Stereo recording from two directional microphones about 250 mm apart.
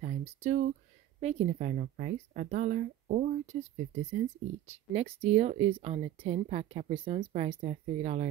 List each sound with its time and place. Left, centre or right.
0.0 s speech: right